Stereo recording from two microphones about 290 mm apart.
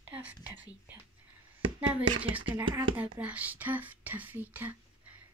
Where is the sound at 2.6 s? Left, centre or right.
Centre.